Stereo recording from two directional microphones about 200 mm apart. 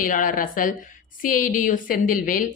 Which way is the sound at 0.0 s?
45° left (ahead or behind).